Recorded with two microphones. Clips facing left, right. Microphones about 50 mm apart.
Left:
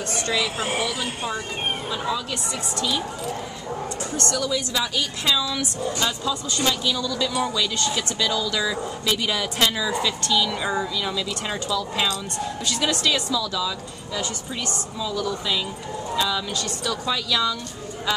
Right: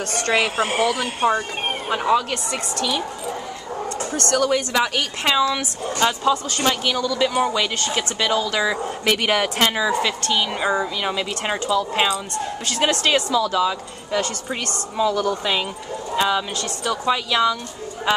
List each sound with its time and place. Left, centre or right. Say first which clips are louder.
0.1 s speech: right 5 dB; right
4.1 s speech: right 6 dB; right
9.0 s speech: right 6 dB; right
12.6 s speech: right 3 dB; right
16.2 s speech: right 5 dB; right